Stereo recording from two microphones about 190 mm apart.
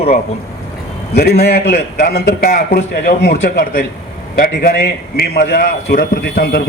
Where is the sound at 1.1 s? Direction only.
55° left (ahead or behind).